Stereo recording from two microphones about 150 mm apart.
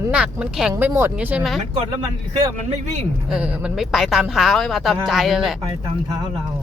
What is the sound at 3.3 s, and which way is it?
Speech, 10° right (ahead or behind).